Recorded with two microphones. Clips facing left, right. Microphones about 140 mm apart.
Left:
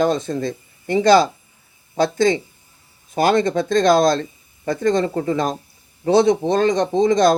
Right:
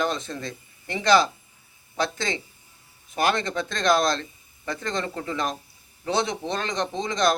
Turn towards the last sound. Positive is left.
turn(degrees=45)  # may be behind; listen again after turning